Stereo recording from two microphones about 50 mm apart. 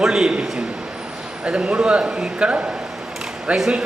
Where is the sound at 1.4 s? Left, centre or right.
Centre.